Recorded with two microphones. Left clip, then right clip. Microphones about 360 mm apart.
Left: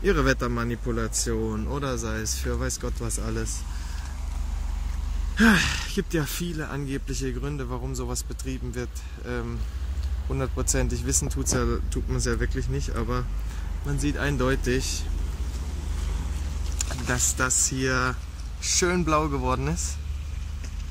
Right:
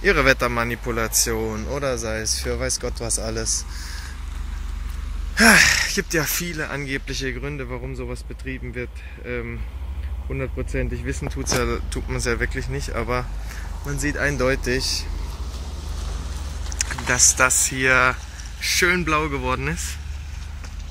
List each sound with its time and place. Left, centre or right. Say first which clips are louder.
0.0 s speech: right 6 dB; centre
5.3 s speech: right 8 dB; centre
16.7 s speech: right 7 dB; centre